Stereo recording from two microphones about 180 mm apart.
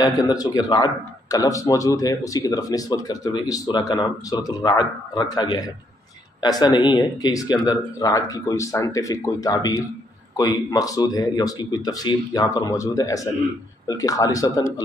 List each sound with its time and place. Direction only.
0.0 s speech: 20° left (ahead or behind)